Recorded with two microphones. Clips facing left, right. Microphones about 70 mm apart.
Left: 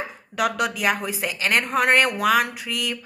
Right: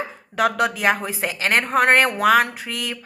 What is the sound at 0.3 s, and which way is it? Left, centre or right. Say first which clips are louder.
A woman's voice: right 3 dB; right.